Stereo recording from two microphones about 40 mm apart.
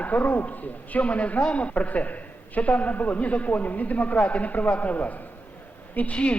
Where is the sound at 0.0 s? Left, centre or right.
Left.